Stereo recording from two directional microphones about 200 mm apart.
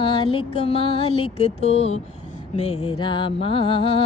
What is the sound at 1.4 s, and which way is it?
Speech, 30° left (ahead or behind).